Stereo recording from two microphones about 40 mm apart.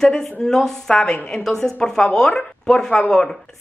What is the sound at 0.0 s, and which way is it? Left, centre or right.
Speech, centre.